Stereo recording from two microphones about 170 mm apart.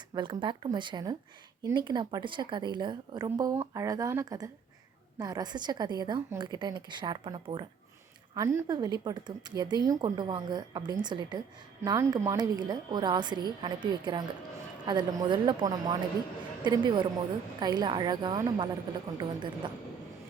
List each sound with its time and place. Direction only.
0.1 s a woman's voice: 30° right (ahead or behind)